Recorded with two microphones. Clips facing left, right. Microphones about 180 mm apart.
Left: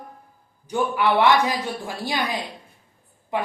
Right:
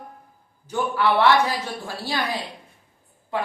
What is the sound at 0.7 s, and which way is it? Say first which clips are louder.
Speech: left 1 dB; 15° left (ahead or behind).